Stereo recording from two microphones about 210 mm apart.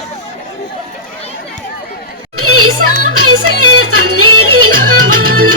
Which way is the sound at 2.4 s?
90° right.